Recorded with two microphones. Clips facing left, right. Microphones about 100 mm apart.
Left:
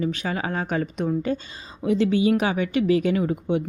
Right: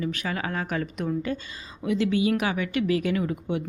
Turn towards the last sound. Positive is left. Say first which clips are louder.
# left 4 dB
turn(degrees=25)  # may be behind; listen again after turning